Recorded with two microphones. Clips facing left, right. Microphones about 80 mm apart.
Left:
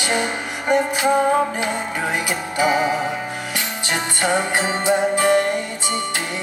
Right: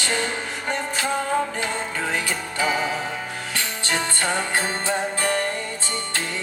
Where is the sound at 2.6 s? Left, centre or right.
Centre.